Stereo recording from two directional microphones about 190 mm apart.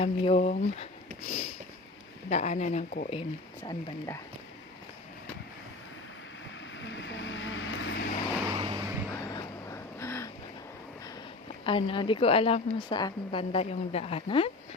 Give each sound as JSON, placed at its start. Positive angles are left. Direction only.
{"t": 0.0, "sound": "speech", "side_deg": 35}
{"t": 3.1, "sound": "a woman's voice", "side_deg": 25}
{"t": 6.7, "sound": "vehicle", "side_deg": 70}
{"t": 8.5, "sound": "vehicle", "side_deg": -30}
{"t": 8.8, "sound": "vehicle", "side_deg": -15}
{"t": 9.1, "sound": "vehicle", "side_deg": 15}
{"t": 11.6, "sound": "a woman's voice", "side_deg": 25}